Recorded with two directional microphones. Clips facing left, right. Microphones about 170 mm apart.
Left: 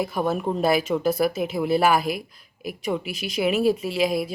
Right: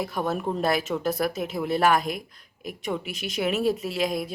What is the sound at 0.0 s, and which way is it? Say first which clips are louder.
Speech: left 3 dB; centre (ahead or behind).